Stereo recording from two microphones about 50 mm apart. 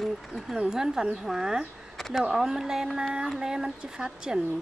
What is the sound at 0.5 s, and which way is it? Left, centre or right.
A woman's voice, centre.